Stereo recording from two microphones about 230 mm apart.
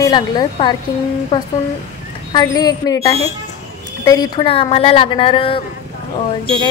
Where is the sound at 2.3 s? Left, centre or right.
Centre.